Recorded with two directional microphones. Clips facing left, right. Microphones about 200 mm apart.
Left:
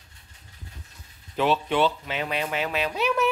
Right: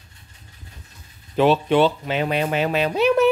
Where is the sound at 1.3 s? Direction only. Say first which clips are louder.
Right 7 dB; 30° right (ahead or behind).